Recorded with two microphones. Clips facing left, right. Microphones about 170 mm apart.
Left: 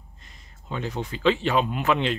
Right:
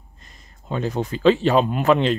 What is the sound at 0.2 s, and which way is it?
Speech, 40° right (ahead or behind).